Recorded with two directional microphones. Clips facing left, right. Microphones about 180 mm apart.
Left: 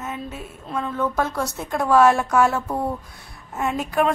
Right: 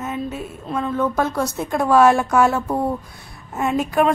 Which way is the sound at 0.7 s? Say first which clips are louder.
Right 3 dB; 25° right (ahead or behind).